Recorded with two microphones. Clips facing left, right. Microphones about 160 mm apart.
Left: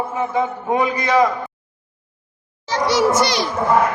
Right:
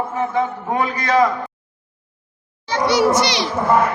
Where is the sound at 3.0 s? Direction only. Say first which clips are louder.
Left 1 dB; 50° left (ahead or behind).